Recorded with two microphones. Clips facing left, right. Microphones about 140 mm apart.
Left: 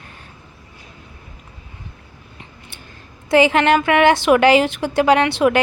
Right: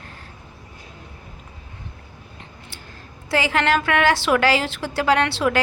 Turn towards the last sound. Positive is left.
turn(degrees=20)  # may be behind; listen again after turning